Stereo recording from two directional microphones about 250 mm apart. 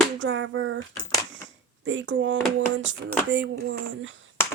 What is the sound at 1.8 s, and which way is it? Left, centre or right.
Speech, right.